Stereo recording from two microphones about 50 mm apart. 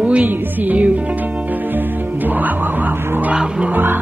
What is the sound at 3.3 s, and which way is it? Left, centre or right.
Music, centre.